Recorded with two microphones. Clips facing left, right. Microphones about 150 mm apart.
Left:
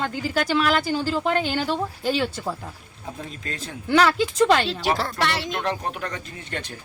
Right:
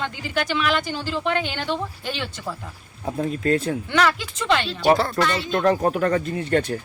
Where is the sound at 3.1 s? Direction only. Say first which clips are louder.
Right 16 dB; 40° right (ahead or behind).